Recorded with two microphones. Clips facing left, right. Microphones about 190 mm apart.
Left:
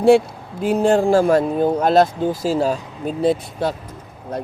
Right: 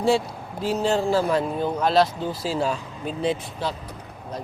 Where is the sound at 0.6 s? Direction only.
55° left (ahead or behind).